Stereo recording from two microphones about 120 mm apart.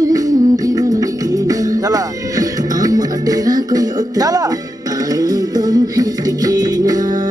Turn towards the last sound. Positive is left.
turn(degrees=-30)  # may be behind; listen again after turning